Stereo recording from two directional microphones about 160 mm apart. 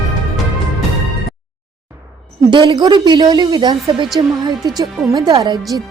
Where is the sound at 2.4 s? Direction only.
30° right (ahead or behind).